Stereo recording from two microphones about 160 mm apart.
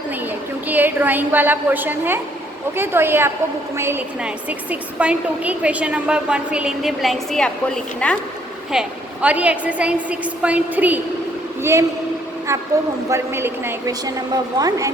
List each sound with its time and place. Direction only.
0.1 s a woman's voice: 10° right (ahead or behind); by 8.2 s 5° left (ahead or behind)
8.7 s a woman's voice: 5° right (ahead or behind)